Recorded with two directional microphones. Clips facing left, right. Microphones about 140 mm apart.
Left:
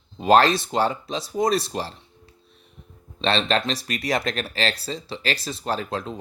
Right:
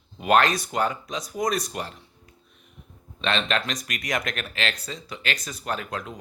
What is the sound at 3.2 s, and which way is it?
Speech, 35° left (ahead or behind).